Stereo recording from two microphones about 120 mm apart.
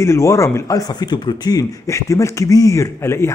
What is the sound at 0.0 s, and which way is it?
Speech, 25° left (ahead or behind).